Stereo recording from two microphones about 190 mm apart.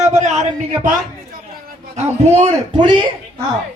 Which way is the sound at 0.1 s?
35° right (ahead or behind).